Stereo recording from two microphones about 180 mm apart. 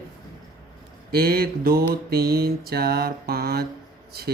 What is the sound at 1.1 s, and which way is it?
Speech, 55° right (ahead or behind).